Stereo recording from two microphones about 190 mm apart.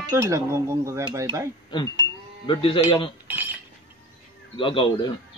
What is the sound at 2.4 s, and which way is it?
Speech, 25° left (ahead or behind).